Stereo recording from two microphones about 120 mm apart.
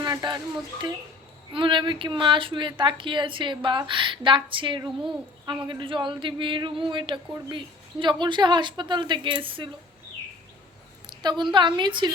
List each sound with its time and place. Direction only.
0.0 s a woman's voice: 35° right (ahead or behind)
11.0 s a woman's voice: 35° right (ahead or behind)